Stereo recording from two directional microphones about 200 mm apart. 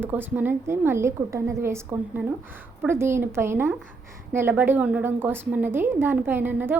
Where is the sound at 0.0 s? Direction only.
10° right (ahead or behind).